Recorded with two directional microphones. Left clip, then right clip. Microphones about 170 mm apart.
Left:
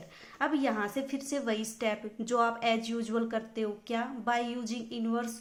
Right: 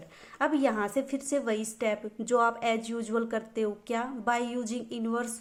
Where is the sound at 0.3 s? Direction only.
35° right (ahead or behind).